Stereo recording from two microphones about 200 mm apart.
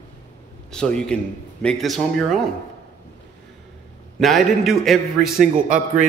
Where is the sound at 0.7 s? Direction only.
5° left (ahead or behind).